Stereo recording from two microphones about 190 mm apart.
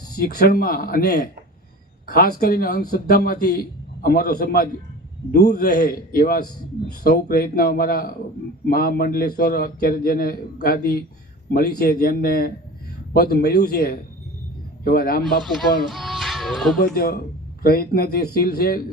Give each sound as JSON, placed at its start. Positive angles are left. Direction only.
{"t": 0.2, "sound": "a man's voice", "side_deg": 55}
{"t": 15.9, "sound": "music", "side_deg": 0}
{"t": 16.7, "sound": "a man's voice", "side_deg": 55}